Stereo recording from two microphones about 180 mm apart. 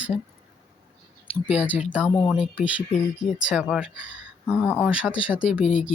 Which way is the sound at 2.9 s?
40° left (ahead or behind).